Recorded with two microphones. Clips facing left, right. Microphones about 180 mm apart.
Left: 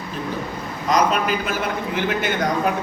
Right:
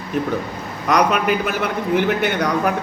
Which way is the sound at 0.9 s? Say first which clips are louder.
Right 2 dB; 65° right (ahead or behind).